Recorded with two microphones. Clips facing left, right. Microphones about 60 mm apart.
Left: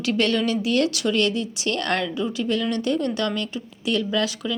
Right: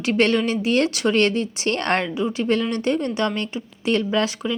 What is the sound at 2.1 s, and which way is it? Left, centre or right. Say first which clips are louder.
A woman's voice: right 3 dB; right.